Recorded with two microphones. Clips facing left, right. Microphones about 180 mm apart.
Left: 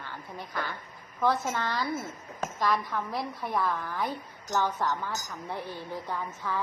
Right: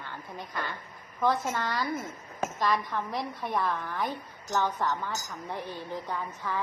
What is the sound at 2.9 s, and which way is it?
Speech, centre (ahead or behind).